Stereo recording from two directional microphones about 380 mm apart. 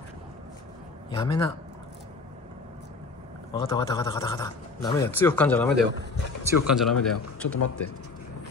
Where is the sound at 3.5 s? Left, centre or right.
Centre.